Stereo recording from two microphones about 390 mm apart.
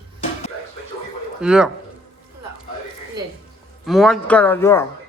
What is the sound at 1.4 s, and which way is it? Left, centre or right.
Speech, centre.